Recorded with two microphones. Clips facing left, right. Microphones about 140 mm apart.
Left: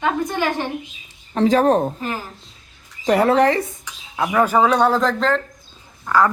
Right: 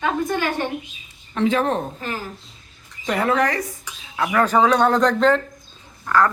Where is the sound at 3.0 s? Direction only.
35° left (ahead or behind).